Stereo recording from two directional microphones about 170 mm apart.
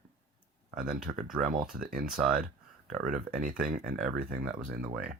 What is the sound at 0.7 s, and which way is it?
Speech, 55° right (ahead or behind).